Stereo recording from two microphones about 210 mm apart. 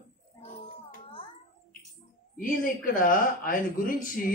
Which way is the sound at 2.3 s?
40° left (ahead or behind).